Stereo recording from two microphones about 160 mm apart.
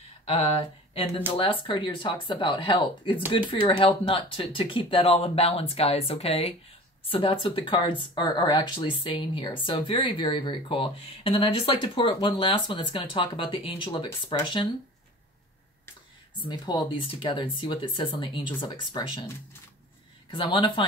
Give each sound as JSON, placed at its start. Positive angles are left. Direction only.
{"t": 1.3, "sound": "speech", "side_deg": 30}
{"t": 16.4, "sound": "speech", "side_deg": 25}